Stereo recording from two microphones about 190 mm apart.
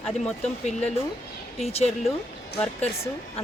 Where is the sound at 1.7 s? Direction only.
35° left (ahead or behind).